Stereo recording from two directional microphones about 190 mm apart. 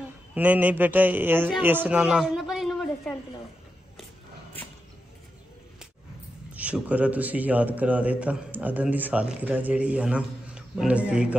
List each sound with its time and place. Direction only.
0.3 s a man's voice: 10° right (ahead or behind)
6.5 s a man's voice: 5° right (ahead or behind)